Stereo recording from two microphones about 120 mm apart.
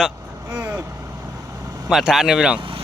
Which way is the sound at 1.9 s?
5° right (ahead or behind).